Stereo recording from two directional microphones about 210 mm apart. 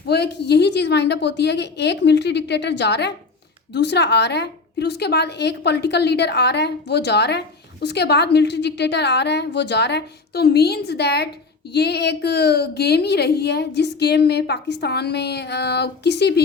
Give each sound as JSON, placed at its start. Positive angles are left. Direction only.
{"t": 0.1, "sound": "a woman's voice", "side_deg": 55}